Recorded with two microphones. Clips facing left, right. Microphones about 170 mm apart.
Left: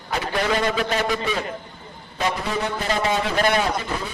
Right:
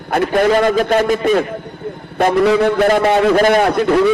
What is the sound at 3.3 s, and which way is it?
Speech, 45° right (ahead or behind).